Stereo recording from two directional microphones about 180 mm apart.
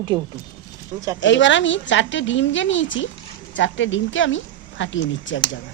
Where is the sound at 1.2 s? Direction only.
90° left.